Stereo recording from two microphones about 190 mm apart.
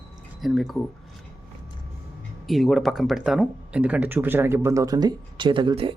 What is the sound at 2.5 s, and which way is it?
Speech, centre (ahead or behind).